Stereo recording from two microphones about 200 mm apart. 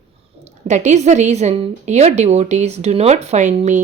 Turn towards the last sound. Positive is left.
turn(degrees=-35)  # may be behind; listen again after turning